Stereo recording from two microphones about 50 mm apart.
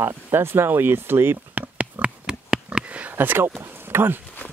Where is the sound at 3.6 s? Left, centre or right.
Right.